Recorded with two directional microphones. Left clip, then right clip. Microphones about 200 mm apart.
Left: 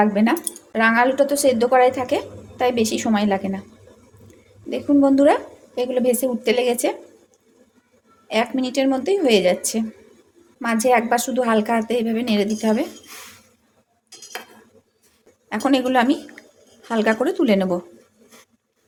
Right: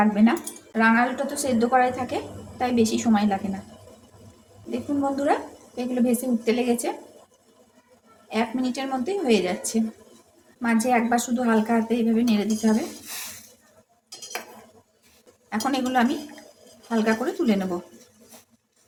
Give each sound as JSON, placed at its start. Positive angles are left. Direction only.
{"t": 0.0, "sound": "speech", "side_deg": 40}
{"t": 5.1, "sound": "speech", "side_deg": 40}
{"t": 8.3, "sound": "speech", "side_deg": 45}
{"t": 15.4, "sound": "speech", "side_deg": 40}